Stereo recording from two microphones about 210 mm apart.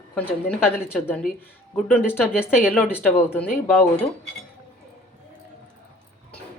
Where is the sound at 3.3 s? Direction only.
10° left (ahead or behind).